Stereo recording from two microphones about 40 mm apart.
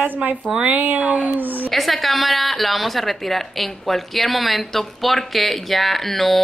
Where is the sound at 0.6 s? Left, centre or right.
Right.